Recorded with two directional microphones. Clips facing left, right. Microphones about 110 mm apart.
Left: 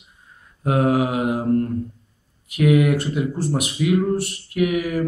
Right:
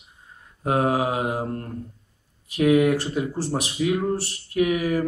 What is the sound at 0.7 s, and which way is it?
Speech, 30° right (ahead or behind).